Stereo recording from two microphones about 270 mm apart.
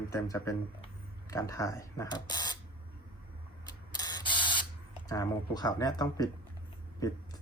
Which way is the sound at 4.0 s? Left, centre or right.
Centre.